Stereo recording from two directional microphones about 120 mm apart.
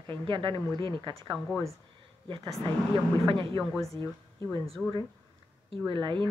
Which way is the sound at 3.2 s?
45° right (ahead or behind).